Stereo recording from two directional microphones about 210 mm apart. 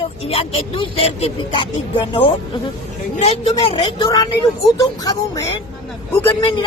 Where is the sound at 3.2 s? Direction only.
30° left (ahead or behind).